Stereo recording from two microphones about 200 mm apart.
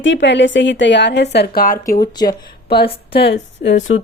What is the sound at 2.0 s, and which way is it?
Speech, 20° left (ahead or behind).